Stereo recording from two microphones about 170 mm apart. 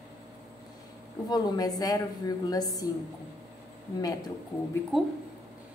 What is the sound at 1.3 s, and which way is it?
A woman's voice, 20° left (ahead or behind).